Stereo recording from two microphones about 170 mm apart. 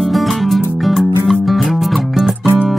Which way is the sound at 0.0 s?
Centre (ahead or behind).